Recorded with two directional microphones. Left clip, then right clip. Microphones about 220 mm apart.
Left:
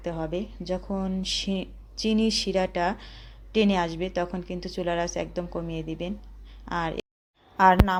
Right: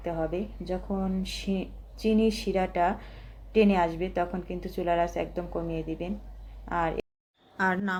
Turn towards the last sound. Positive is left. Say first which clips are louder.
# left 9 dB
turn(degrees=10)  # may be behind; listen again after turning